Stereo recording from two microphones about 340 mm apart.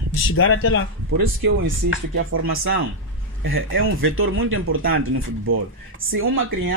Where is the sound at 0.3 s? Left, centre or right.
Left.